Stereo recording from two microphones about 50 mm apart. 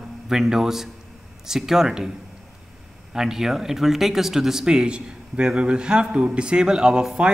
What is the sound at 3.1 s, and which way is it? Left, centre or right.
A man's voice, centre.